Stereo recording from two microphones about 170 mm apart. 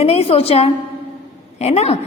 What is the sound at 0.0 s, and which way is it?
A woman's voice, 35° left (ahead or behind).